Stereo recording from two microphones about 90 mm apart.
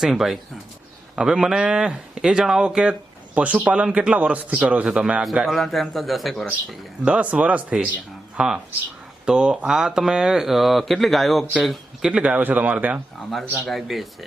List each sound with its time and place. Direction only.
0.0 s speech: 5° right (ahead or behind)
7.0 s speech: 15° right (ahead or behind)
13.6 s speech: centre (ahead or behind)